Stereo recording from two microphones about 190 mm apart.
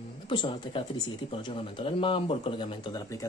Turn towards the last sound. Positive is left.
turn(degrees=20)  # may be behind; listen again after turning